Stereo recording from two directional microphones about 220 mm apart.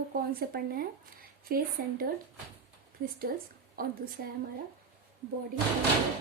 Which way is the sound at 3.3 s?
45° right (ahead or behind).